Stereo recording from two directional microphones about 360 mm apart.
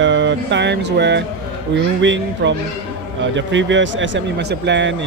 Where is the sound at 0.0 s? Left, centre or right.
Right.